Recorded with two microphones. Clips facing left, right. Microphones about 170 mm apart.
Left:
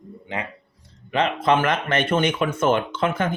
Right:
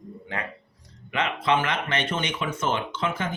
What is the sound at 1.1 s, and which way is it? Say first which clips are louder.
Speech: left 4 dB; 40° left (ahead or behind).